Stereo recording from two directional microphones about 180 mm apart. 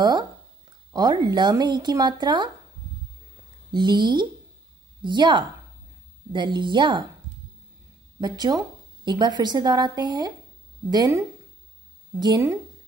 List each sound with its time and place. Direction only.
0.9 s a woman's voice: 25° right (ahead or behind)
3.7 s a woman's voice: 25° right (ahead or behind)
8.2 s a woman's voice: 20° right (ahead or behind)